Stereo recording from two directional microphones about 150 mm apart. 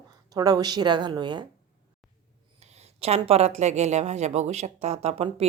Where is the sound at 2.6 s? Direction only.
45° right (ahead or behind).